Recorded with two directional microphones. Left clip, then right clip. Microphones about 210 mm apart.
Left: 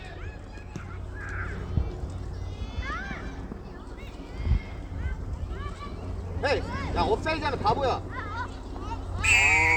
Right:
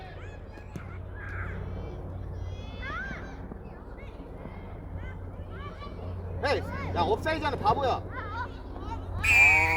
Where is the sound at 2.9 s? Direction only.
25° right (ahead or behind).